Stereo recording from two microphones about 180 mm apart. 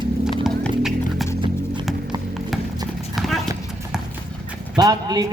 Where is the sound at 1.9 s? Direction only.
Centre (ahead or behind).